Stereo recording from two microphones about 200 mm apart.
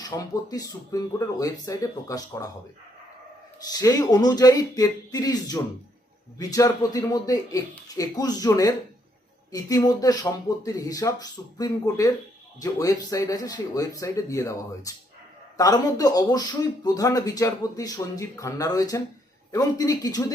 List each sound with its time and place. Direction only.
0.0 s a man's voice: 20° left (ahead or behind)
3.6 s a man's voice: 20° left (ahead or behind)